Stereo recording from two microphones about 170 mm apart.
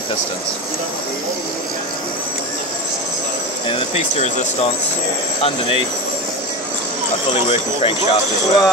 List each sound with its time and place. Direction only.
3.6 s speech: 35° left (ahead or behind)
7.4 s speech: 35° left (ahead or behind)